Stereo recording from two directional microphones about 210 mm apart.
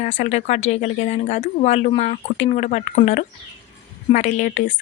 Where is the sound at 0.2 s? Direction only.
35° left (ahead or behind).